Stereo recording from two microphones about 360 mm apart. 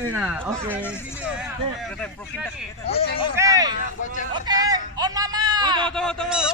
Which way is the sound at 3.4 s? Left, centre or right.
Centre.